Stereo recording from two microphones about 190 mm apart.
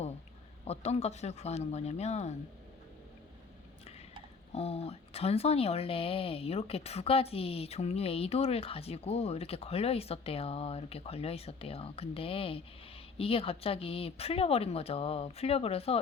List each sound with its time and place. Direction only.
0.7 s speech: 35° left (ahead or behind)
4.5 s speech: 35° left (ahead or behind)